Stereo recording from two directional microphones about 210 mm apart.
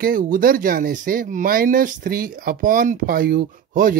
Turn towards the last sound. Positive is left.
turn(degrees=-40)  # may be behind; listen again after turning